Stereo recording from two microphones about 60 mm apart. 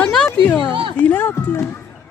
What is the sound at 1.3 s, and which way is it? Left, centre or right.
Speech, left.